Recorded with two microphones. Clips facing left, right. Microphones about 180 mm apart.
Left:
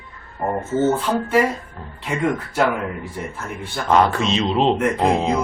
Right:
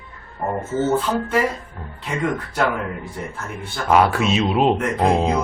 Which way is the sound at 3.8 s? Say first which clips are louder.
Right 1 dB; 5° right (ahead or behind).